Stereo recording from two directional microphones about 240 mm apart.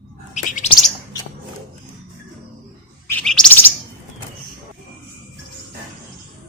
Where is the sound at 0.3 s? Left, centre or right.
Left.